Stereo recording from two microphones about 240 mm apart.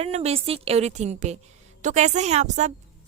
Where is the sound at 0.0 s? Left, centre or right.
Right.